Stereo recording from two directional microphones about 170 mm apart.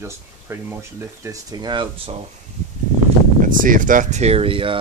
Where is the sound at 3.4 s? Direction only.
50° right (ahead or behind); by 4.8 s 30° right (ahead or behind).